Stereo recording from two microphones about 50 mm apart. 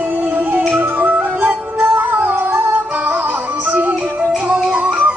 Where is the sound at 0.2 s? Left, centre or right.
Right.